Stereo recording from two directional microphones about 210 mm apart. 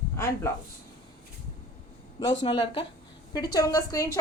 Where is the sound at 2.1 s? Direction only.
25° left (ahead or behind).